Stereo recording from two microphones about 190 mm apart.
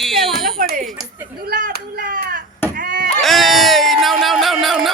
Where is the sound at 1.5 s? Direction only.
50° right (ahead or behind).